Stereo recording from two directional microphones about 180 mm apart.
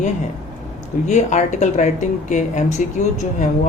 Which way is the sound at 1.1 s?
40° left (ahead or behind).